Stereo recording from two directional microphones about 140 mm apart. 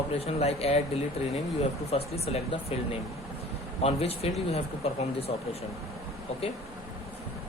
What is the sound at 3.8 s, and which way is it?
Speech, 45° left (ahead or behind).